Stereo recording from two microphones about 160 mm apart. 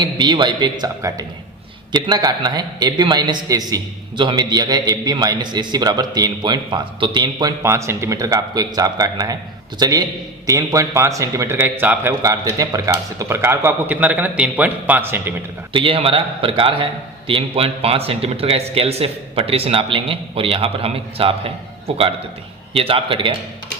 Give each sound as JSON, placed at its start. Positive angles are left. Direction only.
{"t": 0.0, "sound": "a man's voice", "side_deg": -30}
{"t": 15.7, "sound": "a man's voice", "side_deg": -35}